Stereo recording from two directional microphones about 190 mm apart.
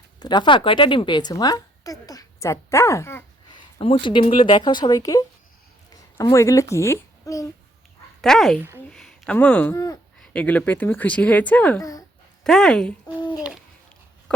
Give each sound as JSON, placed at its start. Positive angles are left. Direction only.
{"t": 0.2, "sound": "a woman's voice", "side_deg": 20}
{"t": 3.5, "sound": "a woman's voice", "side_deg": 30}
{"t": 8.2, "sound": "speech", "side_deg": 0}
{"t": 9.7, "sound": "a woman's voice", "side_deg": 20}
{"t": 10.2, "sound": "speech", "side_deg": 5}
{"t": 14.3, "sound": "a sound", "side_deg": 5}